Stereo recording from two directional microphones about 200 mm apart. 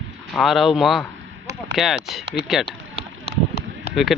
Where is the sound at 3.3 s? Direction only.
50° left (ahead or behind).